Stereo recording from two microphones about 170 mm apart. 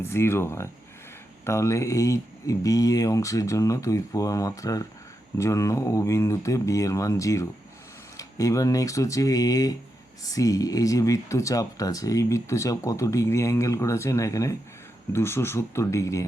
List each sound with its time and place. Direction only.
0.0 s speech: 15° left (ahead or behind)